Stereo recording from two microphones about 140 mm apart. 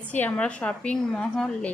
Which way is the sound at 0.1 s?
10° left (ahead or behind).